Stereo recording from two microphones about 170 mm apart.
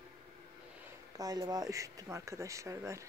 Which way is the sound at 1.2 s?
20° right (ahead or behind).